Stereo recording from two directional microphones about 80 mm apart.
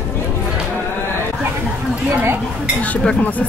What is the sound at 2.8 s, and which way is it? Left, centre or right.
Speech, centre.